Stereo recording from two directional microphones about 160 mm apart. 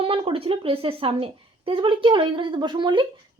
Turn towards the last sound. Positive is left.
turn(degrees=-30)  # may be behind; listen again after turning